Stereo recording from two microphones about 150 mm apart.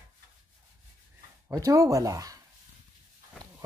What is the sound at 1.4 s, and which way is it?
Speech, 20° right (ahead or behind).